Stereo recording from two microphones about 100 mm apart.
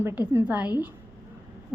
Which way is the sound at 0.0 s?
20° right (ahead or behind).